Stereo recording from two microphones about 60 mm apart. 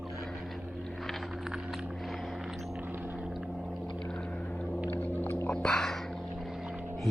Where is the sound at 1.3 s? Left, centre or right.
Centre.